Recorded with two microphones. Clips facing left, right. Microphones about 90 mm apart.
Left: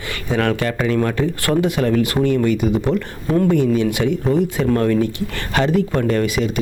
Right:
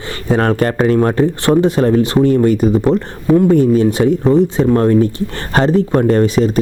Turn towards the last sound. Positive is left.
turn(degrees=-35)  # may be behind; listen again after turning